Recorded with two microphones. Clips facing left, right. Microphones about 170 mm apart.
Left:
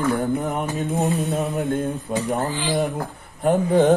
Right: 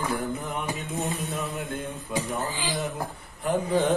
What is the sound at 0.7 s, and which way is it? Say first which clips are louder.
Speech: left 8 dB; 40° left (ahead or behind).